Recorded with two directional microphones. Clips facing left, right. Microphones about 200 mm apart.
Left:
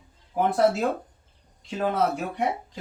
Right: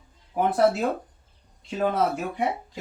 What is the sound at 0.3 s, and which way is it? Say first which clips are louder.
Speech: even; 5° right (ahead or behind).